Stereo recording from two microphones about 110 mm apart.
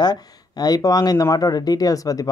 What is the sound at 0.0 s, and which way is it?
Speech, 40° left (ahead or behind).